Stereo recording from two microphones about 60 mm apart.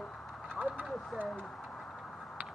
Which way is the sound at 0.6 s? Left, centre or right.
Right.